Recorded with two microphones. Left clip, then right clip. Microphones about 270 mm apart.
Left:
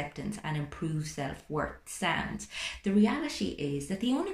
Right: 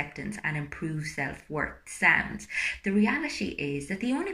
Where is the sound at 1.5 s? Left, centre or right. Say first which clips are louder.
Right 1 dB; centre.